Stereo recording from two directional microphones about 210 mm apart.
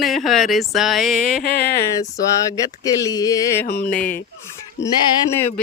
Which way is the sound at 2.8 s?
15° left (ahead or behind).